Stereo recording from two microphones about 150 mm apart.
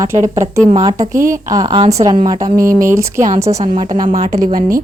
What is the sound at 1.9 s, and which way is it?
A woman's voice, 20° right (ahead or behind).